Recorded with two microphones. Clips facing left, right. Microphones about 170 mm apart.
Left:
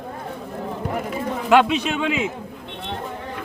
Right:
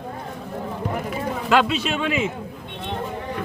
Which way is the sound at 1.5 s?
15° left (ahead or behind).